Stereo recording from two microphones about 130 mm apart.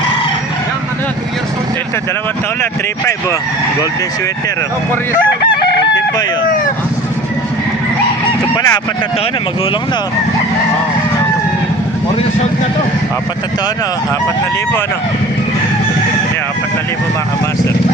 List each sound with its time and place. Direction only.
8.5 s speech: 25° left (ahead or behind)